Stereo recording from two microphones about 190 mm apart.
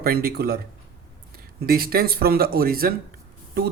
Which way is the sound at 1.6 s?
50° right (ahead or behind).